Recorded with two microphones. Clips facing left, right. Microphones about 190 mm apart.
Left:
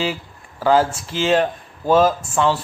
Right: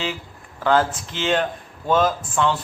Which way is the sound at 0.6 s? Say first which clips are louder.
Left 3 dB; 10° left (ahead or behind).